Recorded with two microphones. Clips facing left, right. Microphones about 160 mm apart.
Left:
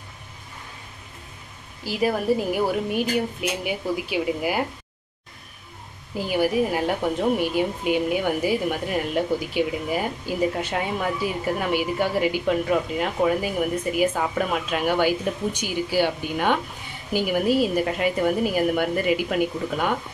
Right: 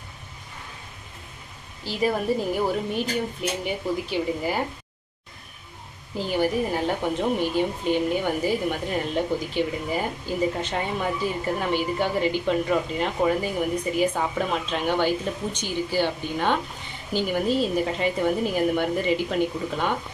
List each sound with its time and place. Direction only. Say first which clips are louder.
1.9 s speech: left 2 dB; 5° left (ahead or behind)
6.1 s a woman's voice: left 2 dB; 10° left (ahead or behind)